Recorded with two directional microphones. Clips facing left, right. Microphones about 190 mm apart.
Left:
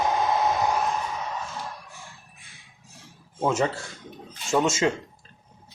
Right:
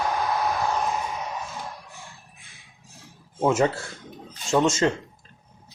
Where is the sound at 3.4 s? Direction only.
5° right (ahead or behind).